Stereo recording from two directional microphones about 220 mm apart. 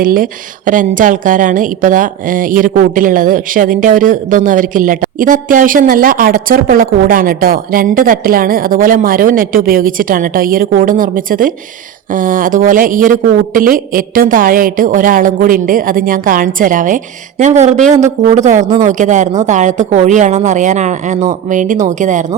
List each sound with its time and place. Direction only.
0.0 s a woman's voice: 40° right (ahead or behind)
18.6 s speech: 15° right (ahead or behind)
18.9 s a woman's voice: 35° right (ahead or behind)